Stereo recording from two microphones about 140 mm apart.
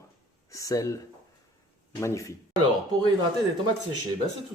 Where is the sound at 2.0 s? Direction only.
20° left (ahead or behind).